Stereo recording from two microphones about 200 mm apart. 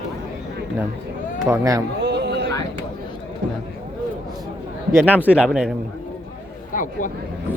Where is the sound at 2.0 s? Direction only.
60° right (ahead or behind).